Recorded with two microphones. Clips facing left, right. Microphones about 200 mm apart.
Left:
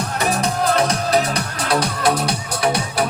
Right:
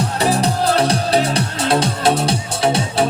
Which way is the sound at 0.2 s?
30° right (ahead or behind).